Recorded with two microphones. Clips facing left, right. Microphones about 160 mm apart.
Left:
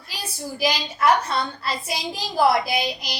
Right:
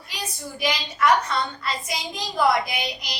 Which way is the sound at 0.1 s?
30° left (ahead or behind).